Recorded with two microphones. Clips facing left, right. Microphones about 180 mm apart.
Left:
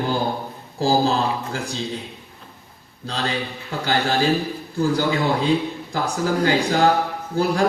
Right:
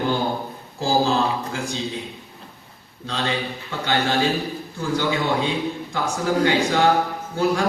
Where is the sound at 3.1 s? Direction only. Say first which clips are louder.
Even; 35° left (ahead or behind).